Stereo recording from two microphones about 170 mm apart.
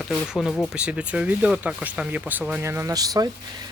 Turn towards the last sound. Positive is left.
turn(degrees=-20)  # may be behind; listen again after turning